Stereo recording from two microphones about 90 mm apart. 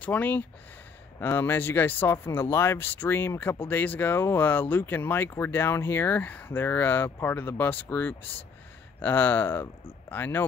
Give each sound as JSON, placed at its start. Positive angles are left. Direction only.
{"t": 0.0, "sound": "speech", "side_deg": 20}